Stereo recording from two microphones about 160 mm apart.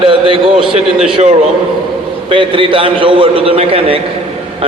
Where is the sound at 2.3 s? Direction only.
35° right (ahead or behind).